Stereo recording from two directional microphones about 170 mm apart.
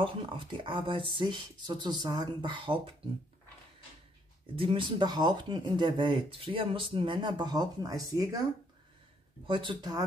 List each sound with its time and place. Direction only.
0.0 s speech: 30° right (ahead or behind)
4.6 s speech: 30° right (ahead or behind)
9.5 s speech: 30° right (ahead or behind)